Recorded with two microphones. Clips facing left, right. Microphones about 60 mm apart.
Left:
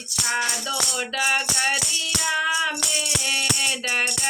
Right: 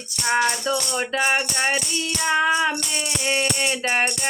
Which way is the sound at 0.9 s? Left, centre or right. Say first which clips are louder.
Right 1 dB; right.